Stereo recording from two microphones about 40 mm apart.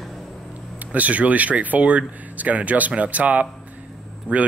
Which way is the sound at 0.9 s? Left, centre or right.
Right.